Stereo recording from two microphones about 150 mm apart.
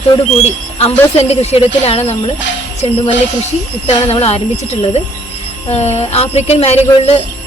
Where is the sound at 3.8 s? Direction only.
45° left (ahead or behind).